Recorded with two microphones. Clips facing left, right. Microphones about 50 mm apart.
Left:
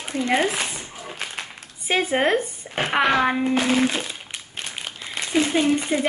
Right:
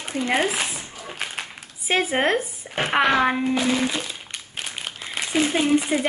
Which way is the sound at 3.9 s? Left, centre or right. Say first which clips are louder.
Left 1 dB; centre.